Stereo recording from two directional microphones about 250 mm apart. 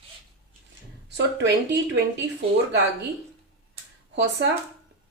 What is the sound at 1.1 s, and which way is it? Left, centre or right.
Speech, right.